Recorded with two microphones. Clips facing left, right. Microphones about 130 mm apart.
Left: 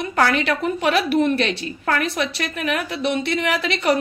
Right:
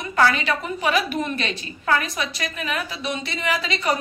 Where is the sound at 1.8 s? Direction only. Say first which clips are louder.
Left 1 dB; 65° left (ahead or behind).